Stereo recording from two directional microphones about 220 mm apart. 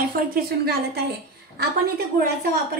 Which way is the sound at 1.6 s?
45° right (ahead or behind).